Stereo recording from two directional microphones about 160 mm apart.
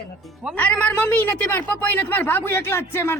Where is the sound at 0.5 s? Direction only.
10° left (ahead or behind).